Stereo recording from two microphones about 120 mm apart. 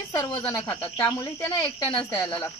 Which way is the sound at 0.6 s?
15° left (ahead or behind).